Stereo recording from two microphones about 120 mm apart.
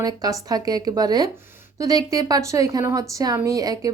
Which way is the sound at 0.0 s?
35° right (ahead or behind).